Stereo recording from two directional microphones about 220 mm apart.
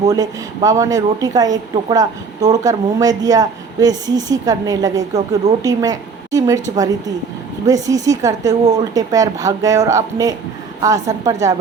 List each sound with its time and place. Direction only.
0.1 s a woman's voice: 15° right (ahead or behind)